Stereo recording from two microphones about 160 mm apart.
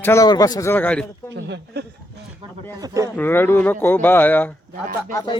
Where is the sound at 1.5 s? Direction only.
90° right.